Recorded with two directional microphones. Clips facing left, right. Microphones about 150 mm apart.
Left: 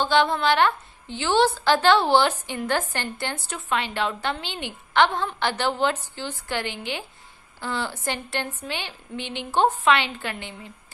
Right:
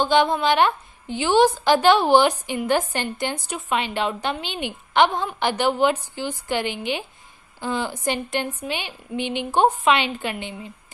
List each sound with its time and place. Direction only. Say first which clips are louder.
0.0 s a woman's voice: right 2 dB; 15° right (ahead or behind)